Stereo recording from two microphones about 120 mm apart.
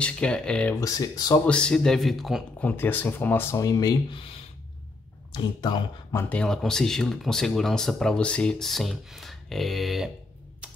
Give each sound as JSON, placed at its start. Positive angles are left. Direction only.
{"t": 0.0, "sound": "speech", "side_deg": 10}
{"t": 0.7, "sound": "speech", "side_deg": 30}
{"t": 1.4, "sound": "speech", "side_deg": 10}
{"t": 2.6, "sound": "speech", "side_deg": 15}
{"t": 3.5, "sound": "speech", "side_deg": 30}
{"t": 5.3, "sound": "speech", "side_deg": 40}
{"t": 6.1, "sound": "speech", "side_deg": 10}